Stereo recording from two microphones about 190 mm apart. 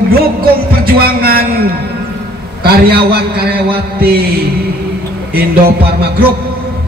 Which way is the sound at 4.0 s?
55° right (ahead or behind).